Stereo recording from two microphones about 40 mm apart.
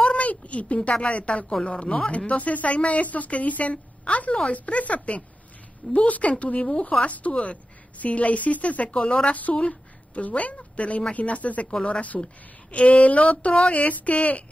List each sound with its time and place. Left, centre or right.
0.0 s a sound: left
1.0 s a woman's voice: left
8.9 s a woman's voice: left